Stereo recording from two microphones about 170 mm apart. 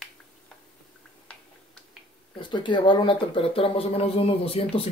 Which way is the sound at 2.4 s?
30° left (ahead or behind).